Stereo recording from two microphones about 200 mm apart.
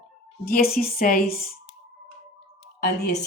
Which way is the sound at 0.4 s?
50° left (ahead or behind).